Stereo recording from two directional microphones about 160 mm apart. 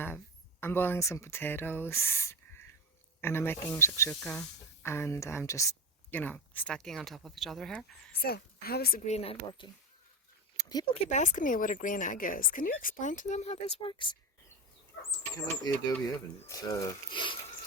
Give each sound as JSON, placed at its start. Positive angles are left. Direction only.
{"t": 0.6, "sound": "speech", "side_deg": 15}
{"t": 4.1, "sound": "speech", "side_deg": 5}
{"t": 8.1, "sound": "a woman's voice", "side_deg": 75}
{"t": 9.0, "sound": "a woman's voice", "side_deg": 40}
{"t": 10.6, "sound": "a sound", "side_deg": 25}
{"t": 10.9, "sound": "a woman's voice", "side_deg": 50}
{"t": 15.4, "sound": "speech", "side_deg": 20}